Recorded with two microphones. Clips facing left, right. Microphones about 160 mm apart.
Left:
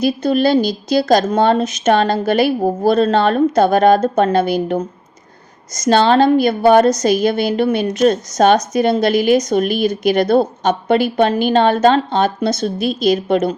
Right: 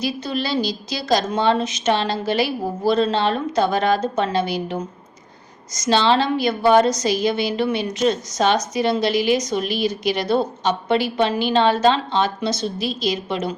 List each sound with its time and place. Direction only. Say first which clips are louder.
0.0 s a woman's voice: left 10 dB; 50° left (ahead or behind)